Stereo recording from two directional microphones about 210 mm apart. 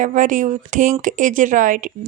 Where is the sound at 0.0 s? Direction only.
35° right (ahead or behind).